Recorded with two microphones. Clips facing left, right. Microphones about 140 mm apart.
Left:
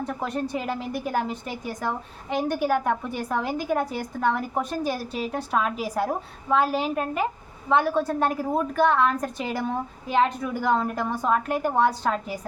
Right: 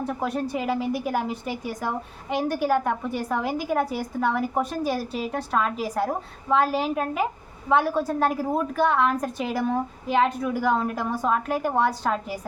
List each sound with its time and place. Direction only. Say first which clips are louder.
0.0 s a woman's voice: right 1 dB; 5° right (ahead or behind)